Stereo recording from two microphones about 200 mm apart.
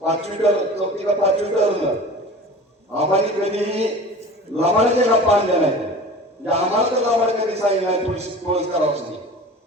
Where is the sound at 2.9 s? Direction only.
30° right (ahead or behind).